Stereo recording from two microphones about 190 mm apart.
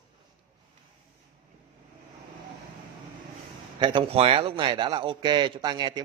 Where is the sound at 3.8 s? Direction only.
25° right (ahead or behind).